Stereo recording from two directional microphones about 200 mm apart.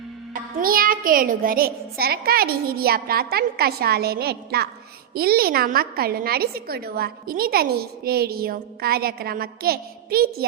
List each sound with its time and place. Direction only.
0.6 s a woman's voice: 45° right (ahead or behind)